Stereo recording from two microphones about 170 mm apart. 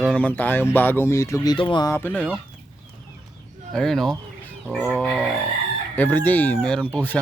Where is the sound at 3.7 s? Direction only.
Centre (ahead or behind).